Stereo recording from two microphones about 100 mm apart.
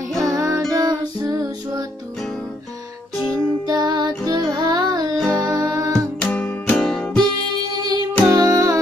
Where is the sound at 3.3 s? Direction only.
40° right (ahead or behind).